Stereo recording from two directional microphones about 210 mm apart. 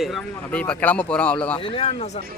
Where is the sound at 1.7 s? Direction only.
30° left (ahead or behind).